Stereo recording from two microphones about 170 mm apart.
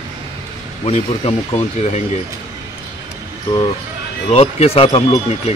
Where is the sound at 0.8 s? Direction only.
40° left (ahead or behind).